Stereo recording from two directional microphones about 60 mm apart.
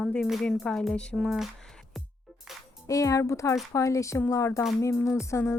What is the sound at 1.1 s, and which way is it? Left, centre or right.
Speech, centre.